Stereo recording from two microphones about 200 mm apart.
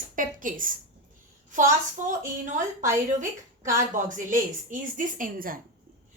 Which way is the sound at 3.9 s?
40° right (ahead or behind).